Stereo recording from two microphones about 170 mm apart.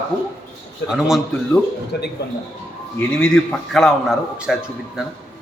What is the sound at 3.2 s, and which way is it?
A man's voice, 5° left (ahead or behind).